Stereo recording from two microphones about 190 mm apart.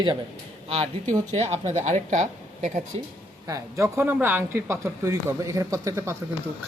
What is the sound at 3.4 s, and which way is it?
Speech, 15° right (ahead or behind).